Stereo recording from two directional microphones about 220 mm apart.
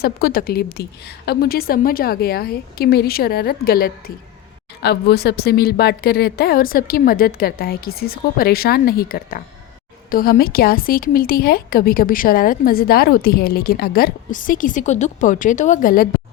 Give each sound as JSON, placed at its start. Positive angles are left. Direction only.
{"t": 0.0, "sound": "a woman's voice", "side_deg": 45}